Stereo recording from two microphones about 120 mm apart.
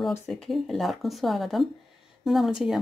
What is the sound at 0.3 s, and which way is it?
Speech, centre (ahead or behind).